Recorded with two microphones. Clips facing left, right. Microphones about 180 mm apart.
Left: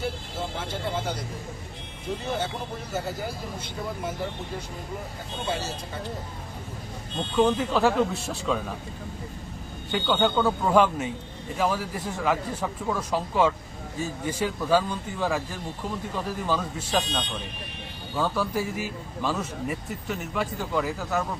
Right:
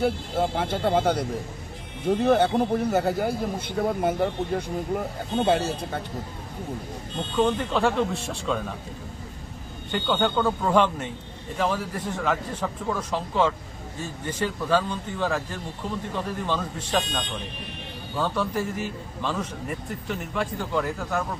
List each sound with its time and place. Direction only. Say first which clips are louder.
0.0 s speech: right 8 dB; 60° right (ahead or behind)
7.3 s a man's voice: left 1 dB; 5° left (ahead or behind)
9.9 s a man's voice: even; centre (ahead or behind)